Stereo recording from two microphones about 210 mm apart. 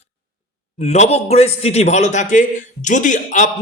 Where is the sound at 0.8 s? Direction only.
35° left (ahead or behind).